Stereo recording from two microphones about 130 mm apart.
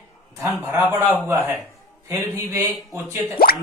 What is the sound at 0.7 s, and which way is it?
A man's voice, 20° right (ahead or behind).